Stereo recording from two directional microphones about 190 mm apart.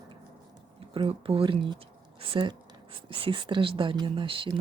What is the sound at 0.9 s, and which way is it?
Speech, 30° right (ahead or behind).